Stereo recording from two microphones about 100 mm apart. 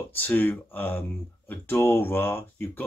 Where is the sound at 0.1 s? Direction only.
20° left (ahead or behind).